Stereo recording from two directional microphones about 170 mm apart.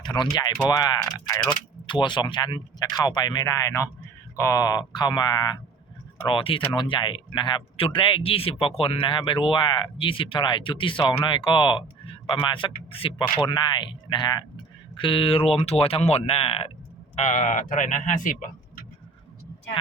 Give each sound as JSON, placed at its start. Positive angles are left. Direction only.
{"t": 0.0, "sound": "speech", "side_deg": 25}
{"t": 17.2, "sound": "speech", "side_deg": 45}